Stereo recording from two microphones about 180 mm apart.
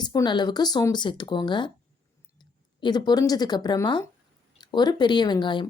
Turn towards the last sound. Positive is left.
turn(degrees=25)  # may be behind; listen again after turning